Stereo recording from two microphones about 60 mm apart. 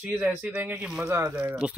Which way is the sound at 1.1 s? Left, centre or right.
Right.